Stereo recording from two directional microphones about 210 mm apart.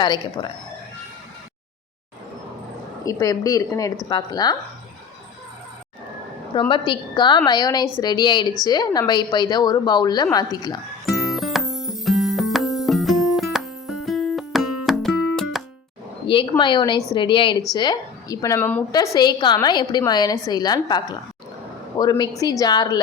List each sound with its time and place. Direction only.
0.0 s a woman's voice: 20° left (ahead or behind)
3.0 s a woman's voice: 15° left (ahead or behind)
6.5 s a woman's voice: 20° left (ahead or behind)
11.0 s music: centre (ahead or behind)
16.3 s a woman's voice: 25° left (ahead or behind)